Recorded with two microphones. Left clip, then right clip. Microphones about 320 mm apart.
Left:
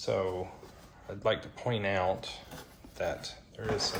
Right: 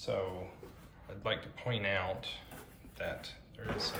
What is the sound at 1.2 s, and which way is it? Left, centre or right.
Speech, centre.